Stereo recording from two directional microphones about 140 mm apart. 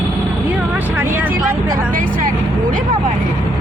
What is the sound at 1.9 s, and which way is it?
Speech, 75° right (ahead or behind).